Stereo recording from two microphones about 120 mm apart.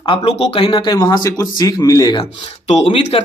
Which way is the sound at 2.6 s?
60° left (ahead or behind).